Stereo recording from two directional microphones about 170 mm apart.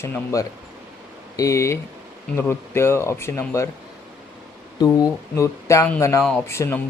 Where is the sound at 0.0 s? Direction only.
15° left (ahead or behind).